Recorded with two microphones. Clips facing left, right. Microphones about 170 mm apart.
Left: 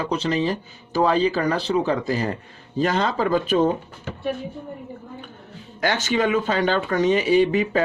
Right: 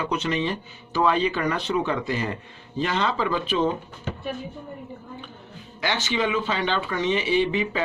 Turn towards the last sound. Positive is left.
turn(degrees=45)  # may be behind; listen again after turning